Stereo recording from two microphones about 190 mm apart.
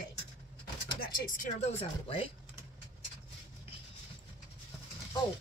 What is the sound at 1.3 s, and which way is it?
Speech, 40° left (ahead or behind).